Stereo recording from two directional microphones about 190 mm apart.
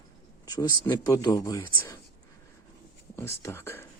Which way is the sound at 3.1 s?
15° left (ahead or behind).